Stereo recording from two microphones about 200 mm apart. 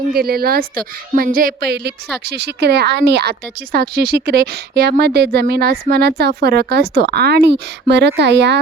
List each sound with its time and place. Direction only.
0.1 s a woman's voice: 50° right (ahead or behind)